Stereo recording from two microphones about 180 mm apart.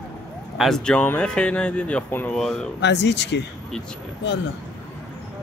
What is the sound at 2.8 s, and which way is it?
Speech, 75° left (ahead or behind).